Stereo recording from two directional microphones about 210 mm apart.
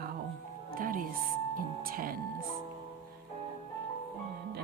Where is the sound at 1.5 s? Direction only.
45° right (ahead or behind).